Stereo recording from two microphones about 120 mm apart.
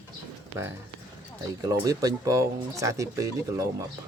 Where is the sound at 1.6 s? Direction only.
30° right (ahead or behind).